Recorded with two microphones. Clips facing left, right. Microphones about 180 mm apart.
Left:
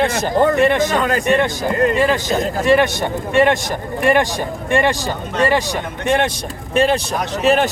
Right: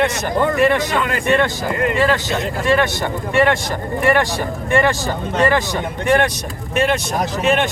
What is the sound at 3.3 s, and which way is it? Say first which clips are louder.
Speech: left 2 dB; 15° left (ahead or behind).